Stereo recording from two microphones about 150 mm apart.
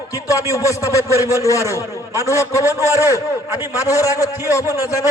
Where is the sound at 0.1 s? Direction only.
20° left (ahead or behind).